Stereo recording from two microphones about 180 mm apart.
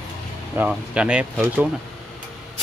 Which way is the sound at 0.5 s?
5° right (ahead or behind).